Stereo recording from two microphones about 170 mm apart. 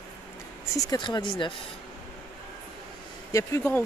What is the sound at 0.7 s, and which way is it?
Speech, 20° left (ahead or behind).